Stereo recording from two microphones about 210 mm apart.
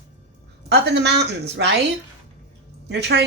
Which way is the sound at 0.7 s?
55° right (ahead or behind).